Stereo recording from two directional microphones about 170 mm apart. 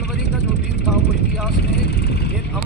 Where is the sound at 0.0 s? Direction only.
80° left.